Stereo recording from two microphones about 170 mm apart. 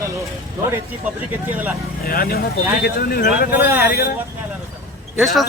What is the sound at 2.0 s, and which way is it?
Speech, 60° left (ahead or behind).